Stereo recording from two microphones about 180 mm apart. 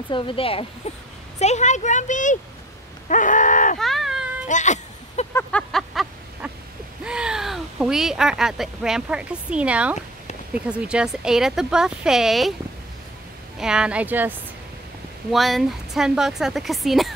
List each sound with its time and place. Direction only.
0.1 s speech: 30° left (ahead or behind); by 2.3 s 45° left (ahead or behind)
3.1 s a sound: 45° left (ahead or behind)
3.8 s a sound: centre (ahead or behind)
4.5 s cat: 40° left (ahead or behind)
5.3 s vehicle: 5° left (ahead or behind)
7.1 s speech: 5° right (ahead or behind)
13.6 s speech: 5° right (ahead or behind)
15.3 s speech: centre (ahead or behind)